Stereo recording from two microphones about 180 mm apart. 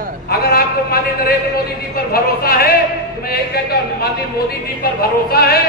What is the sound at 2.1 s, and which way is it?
Speech, 55° left (ahead or behind).